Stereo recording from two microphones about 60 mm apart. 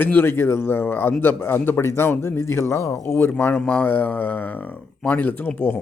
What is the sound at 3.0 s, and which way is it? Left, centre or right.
A man's voice, left.